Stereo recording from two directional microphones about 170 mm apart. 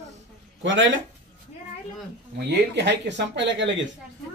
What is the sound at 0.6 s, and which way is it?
Speech, 90° right.